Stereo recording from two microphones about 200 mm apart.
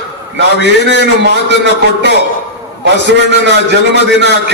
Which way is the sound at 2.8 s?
60° right (ahead or behind).